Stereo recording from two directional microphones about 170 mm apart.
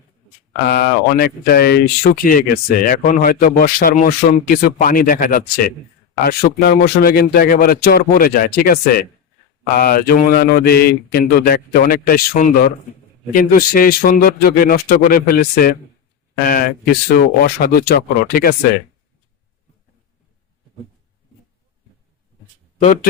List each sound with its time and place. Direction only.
0.7 s speech: 65° left (ahead or behind)
6.2 s speech: 65° left (ahead or behind)